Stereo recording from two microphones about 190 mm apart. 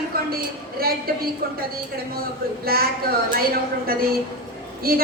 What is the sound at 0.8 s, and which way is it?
Speech, 50° right (ahead or behind).